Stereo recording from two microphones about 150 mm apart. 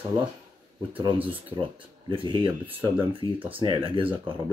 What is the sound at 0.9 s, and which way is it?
Speech, 35° right (ahead or behind).